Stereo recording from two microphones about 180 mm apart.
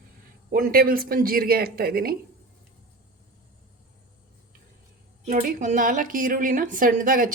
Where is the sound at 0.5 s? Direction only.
55° right (ahead or behind).